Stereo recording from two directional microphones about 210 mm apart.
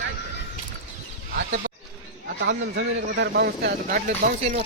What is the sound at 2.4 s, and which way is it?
Speech, 55° right (ahead or behind).